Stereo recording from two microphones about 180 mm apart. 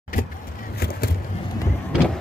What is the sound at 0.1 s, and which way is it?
Vehicle, 50° left (ahead or behind).